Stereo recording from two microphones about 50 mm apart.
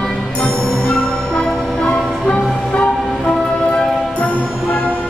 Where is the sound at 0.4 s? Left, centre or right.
Centre.